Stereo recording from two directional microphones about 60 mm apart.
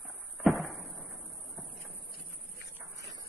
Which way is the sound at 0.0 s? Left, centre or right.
Centre.